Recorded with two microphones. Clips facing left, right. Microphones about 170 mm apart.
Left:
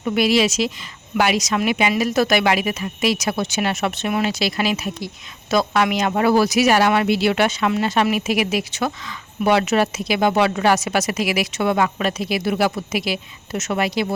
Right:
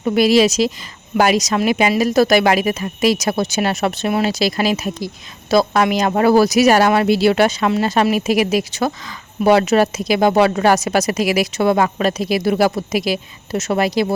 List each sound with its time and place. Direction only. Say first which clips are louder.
0.0 s speech: right 5 dB; 40° right (ahead or behind)